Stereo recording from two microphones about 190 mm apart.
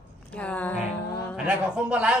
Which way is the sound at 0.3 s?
5° left (ahead or behind).